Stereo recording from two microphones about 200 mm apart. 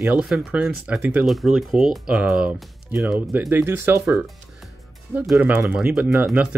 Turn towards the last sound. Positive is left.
turn(degrees=-5)  # may be behind; listen again after turning